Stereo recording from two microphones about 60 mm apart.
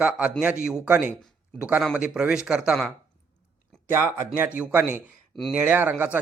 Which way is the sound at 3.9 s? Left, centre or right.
Right.